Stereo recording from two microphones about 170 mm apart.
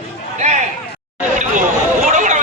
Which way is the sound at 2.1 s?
45° right (ahead or behind).